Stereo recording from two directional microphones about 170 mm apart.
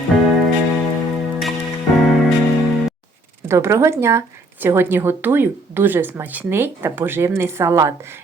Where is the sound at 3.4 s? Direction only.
15° right (ahead or behind).